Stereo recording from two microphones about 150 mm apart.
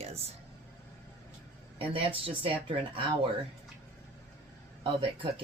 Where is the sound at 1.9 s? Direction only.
40° right (ahead or behind).